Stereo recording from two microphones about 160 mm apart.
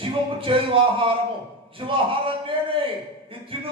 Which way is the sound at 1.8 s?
35° right (ahead or behind).